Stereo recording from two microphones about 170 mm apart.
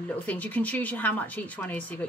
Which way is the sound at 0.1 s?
10° left (ahead or behind).